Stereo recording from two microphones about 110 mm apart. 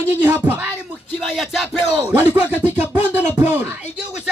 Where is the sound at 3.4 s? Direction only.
15° right (ahead or behind).